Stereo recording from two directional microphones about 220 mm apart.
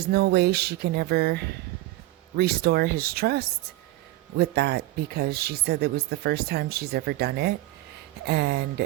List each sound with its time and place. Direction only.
0.0 s speech: 45° right (ahead or behind)